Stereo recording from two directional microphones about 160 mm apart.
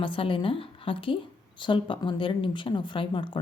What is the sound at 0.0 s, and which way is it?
A woman's voice, 30° left (ahead or behind).